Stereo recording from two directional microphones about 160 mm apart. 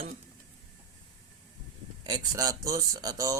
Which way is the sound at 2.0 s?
25° right (ahead or behind).